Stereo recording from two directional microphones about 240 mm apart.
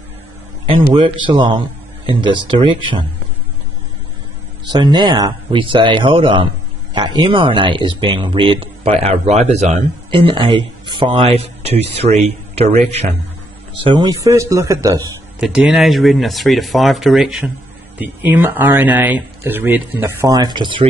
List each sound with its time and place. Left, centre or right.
0.7 s speech: right
4.6 s speech: centre
15.4 s speech: centre